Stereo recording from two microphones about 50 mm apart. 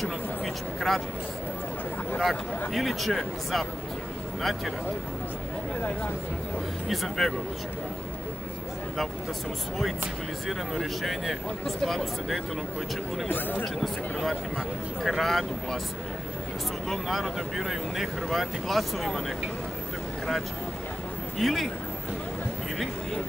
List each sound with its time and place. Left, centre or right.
0.7 s speech: centre
2.7 s speech: centre
6.9 s speech: centre
10.7 s speech: centre
13.3 s speech: left
13.7 s speech: centre
16.9 s speech: centre
21.4 s speech: centre